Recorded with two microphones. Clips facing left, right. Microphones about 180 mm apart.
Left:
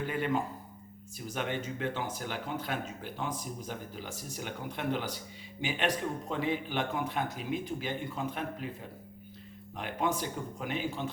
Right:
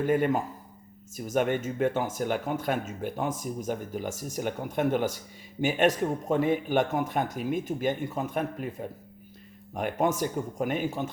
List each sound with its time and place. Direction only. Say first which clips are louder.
0.0 s speech: right 7 dB; 45° right (ahead or behind)